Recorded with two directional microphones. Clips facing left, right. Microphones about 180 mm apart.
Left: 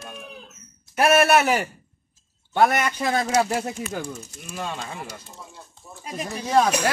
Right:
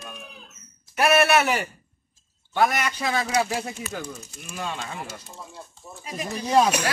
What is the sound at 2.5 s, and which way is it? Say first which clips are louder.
A man's voice: left 3 dB; 55° left (ahead or behind).